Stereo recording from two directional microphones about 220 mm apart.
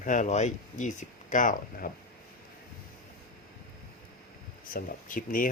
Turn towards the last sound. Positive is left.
turn(degrees=40)  # may be behind; listen again after turning